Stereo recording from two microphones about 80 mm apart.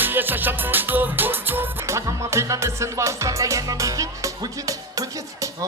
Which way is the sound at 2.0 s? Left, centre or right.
Right.